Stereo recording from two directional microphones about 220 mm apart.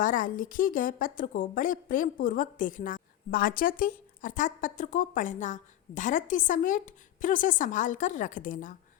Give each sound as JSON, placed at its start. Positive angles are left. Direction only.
{"t": 0.0, "sound": "a woman's voice", "side_deg": 35}